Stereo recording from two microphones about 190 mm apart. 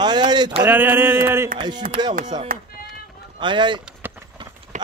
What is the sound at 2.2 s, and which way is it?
Speech, 45° right (ahead or behind).